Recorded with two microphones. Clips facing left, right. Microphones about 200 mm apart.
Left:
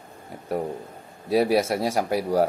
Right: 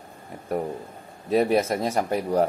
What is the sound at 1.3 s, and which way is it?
Speech, 5° left (ahead or behind).